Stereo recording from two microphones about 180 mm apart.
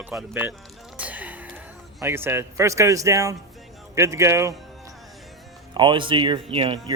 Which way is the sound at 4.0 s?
15° right (ahead or behind).